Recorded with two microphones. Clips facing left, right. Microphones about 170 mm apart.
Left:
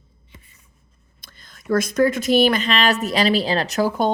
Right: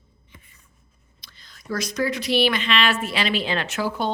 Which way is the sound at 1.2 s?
50° left (ahead or behind).